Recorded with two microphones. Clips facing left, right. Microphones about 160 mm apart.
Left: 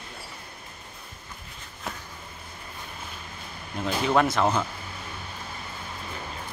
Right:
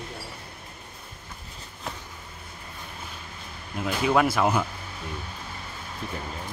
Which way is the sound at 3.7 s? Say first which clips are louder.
Even; 5° right (ahead or behind).